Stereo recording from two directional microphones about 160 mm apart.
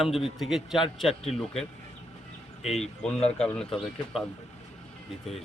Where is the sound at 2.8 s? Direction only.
5° left (ahead or behind).